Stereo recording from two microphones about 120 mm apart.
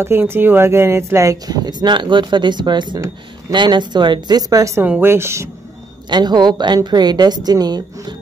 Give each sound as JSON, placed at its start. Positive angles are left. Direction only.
{"t": 0.0, "sound": "a woman's voice", "side_deg": -20}
{"t": 4.8, "sound": "speech", "side_deg": -15}
{"t": 6.0, "sound": "a woman's voice", "side_deg": -35}